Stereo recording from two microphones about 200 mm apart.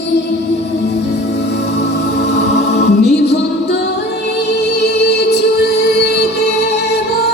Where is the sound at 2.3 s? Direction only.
55° left (ahead or behind).